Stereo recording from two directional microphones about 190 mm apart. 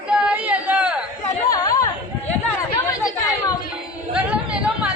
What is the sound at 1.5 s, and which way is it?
Chatter, 20° left (ahead or behind).